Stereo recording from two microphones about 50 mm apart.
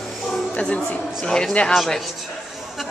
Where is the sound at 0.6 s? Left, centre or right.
Left.